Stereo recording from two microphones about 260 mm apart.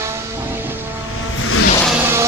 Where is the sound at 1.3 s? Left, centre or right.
Left.